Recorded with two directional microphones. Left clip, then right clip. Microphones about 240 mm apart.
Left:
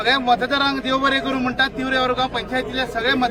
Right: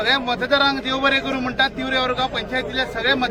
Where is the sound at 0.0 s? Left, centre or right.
Centre.